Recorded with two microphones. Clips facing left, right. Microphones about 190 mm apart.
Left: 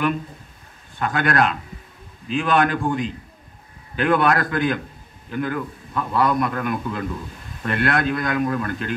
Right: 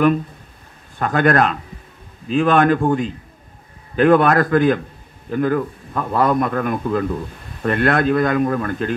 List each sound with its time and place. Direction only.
1.0 s a man's voice: 40° right (ahead or behind)